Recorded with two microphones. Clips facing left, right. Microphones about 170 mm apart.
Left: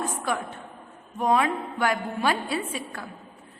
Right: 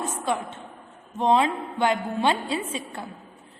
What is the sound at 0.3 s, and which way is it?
A woman's voice, 25° right (ahead or behind).